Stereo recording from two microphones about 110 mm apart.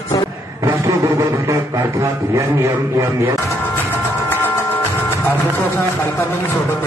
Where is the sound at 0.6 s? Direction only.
30° right (ahead or behind).